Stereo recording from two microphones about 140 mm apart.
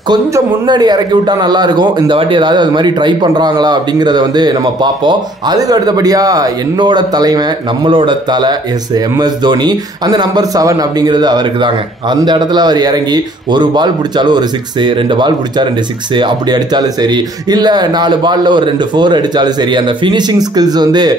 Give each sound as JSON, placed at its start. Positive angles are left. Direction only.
{"t": 0.1, "sound": "a man's voice", "side_deg": -30}